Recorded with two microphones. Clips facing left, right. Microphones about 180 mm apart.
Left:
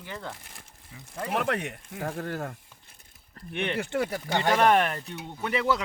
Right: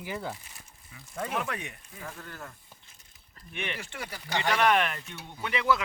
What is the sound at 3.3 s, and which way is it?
Speech, 60° left (ahead or behind).